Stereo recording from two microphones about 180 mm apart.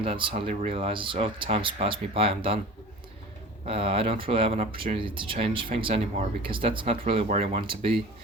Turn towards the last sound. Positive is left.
turn(degrees=-30)  # may be behind; listen again after turning